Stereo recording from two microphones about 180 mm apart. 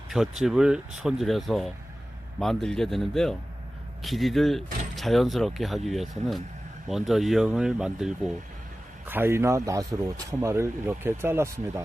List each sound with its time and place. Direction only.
0.1 s speech: centre (ahead or behind)